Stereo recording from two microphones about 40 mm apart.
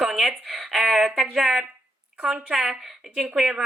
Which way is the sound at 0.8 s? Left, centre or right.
Right.